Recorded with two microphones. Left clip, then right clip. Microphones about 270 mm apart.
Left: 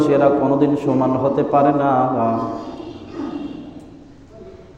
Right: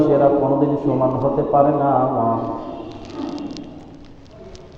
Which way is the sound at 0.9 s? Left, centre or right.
Left.